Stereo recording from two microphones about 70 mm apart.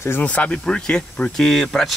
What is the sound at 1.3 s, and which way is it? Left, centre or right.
Speech, centre.